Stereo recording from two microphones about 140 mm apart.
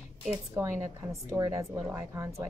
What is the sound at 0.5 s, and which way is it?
A woman's voice, 20° right (ahead or behind).